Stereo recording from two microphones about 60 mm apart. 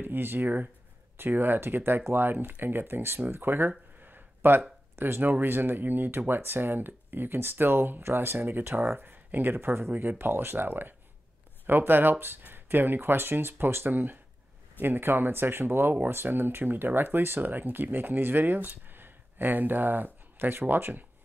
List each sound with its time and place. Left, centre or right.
0.0 s speech: right